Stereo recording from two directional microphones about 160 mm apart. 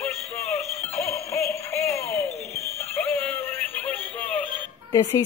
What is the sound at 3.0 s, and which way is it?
Synthetic singing, 10° left (ahead or behind).